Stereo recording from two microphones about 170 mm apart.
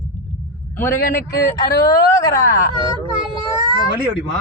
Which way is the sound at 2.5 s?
65° left (ahead or behind).